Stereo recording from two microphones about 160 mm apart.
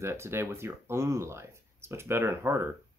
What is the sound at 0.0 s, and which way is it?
Speech, 15° right (ahead or behind).